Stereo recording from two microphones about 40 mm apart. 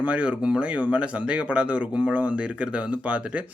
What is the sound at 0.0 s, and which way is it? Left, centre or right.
Speech, right.